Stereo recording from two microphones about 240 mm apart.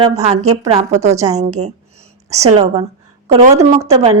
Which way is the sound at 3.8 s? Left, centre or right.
Right.